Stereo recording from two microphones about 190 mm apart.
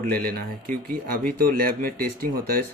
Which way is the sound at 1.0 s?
50° right (ahead or behind).